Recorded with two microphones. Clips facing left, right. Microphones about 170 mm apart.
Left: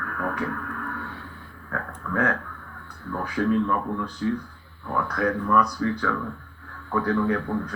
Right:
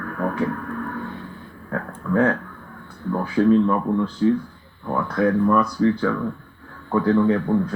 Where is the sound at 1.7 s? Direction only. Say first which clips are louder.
Right 7 dB; 25° right (ahead or behind).